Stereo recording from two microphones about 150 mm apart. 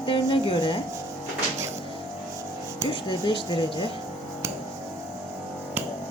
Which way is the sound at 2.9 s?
30° left (ahead or behind).